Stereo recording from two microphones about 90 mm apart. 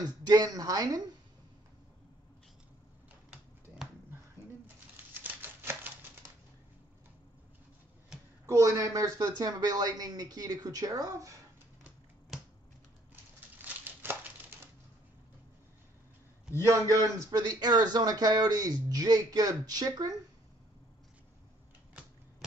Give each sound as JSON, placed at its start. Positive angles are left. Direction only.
{"t": 0.0, "sound": "speech", "side_deg": -50}
{"t": 5.1, "sound": "a sound", "side_deg": -20}
{"t": 8.5, "sound": "speech", "side_deg": -35}
{"t": 12.3, "sound": "finger snapping", "side_deg": -5}
{"t": 13.1, "sound": "a sound", "side_deg": -25}
{"t": 16.6, "sound": "speech", "side_deg": -35}
{"t": 17.4, "sound": "speech", "side_deg": -50}